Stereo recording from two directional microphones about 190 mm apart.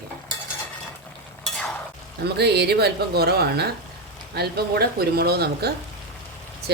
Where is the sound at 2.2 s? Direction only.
60° right (ahead or behind).